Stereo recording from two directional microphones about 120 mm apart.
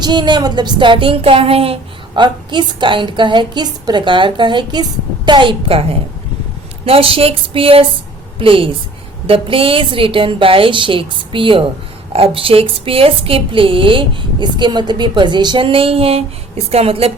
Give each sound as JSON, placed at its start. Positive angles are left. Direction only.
{"t": 0.0, "sound": "a woman's voice", "side_deg": -40}